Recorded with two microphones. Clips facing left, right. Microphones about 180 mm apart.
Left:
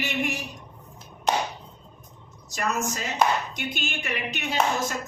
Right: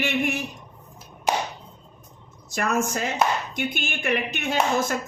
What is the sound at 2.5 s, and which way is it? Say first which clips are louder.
A woman's voice: right 4 dB; 50° right (ahead or behind).